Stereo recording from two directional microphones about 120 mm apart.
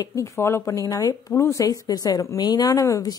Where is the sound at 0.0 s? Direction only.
25° left (ahead or behind).